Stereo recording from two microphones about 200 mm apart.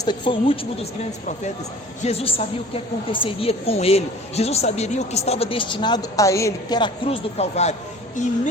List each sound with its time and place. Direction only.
0.0 s a woman's voice: 25° left (ahead or behind)
2.0 s a woman's voice: 30° left (ahead or behind)